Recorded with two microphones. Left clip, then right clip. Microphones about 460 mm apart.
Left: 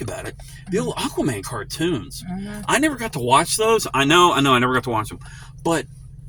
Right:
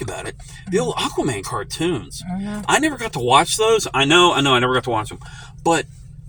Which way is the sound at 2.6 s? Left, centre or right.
Left.